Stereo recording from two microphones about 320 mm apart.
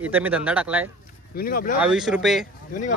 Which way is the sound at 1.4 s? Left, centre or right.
Left.